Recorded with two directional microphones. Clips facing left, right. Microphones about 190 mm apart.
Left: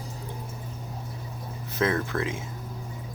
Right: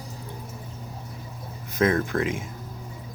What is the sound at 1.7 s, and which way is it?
Speech, 45° right (ahead or behind).